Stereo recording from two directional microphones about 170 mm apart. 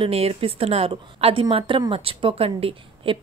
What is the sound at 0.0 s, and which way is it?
A woman's voice, 35° right (ahead or behind).